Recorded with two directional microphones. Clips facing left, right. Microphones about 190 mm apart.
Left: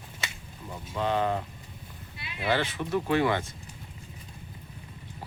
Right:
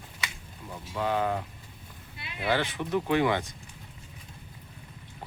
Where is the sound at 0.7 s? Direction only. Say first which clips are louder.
Left 1 dB; 5° right (ahead or behind).